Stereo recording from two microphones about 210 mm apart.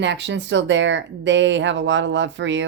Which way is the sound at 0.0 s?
55° right (ahead or behind).